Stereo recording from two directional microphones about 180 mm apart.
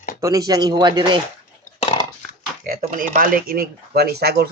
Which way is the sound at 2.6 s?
50° right (ahead or behind).